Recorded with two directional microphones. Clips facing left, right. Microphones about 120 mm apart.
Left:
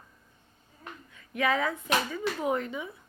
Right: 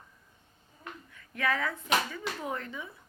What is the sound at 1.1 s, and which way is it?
Speech, 20° left (ahead or behind).